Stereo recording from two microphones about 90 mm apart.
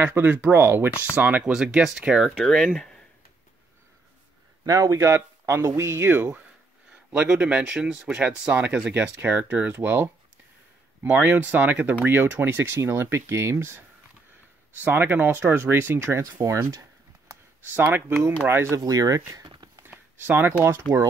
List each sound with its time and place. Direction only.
0.0 s speech: 20° right (ahead or behind)
1.5 s speech: 5° right (ahead or behind)
4.6 s speech: 40° right (ahead or behind)
7.1 s speech: 10° right (ahead or behind)
11.1 s speech: 15° right (ahead or behind); by 16.8 s 30° right (ahead or behind)
17.8 s speech: 25° right (ahead or behind)
18.8 s speech: 45° right (ahead or behind)
19.3 s a sound: 55° right (ahead or behind)
19.8 s a sound: 25° right (ahead or behind)
20.9 s speech: 65° right (ahead or behind)